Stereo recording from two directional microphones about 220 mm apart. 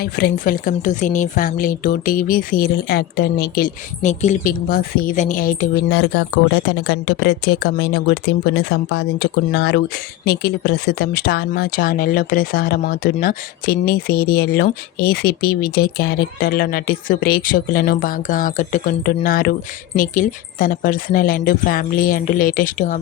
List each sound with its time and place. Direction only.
0.0 s a woman's voice: 45° left (ahead or behind)